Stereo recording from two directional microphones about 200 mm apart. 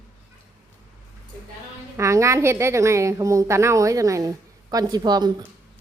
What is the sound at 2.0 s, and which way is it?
A woman's voice, 15° right (ahead or behind).